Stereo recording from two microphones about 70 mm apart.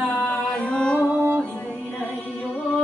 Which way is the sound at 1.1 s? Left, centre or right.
Right.